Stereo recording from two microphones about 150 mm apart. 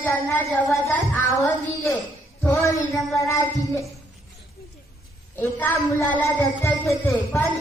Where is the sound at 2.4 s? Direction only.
20° left (ahead or behind).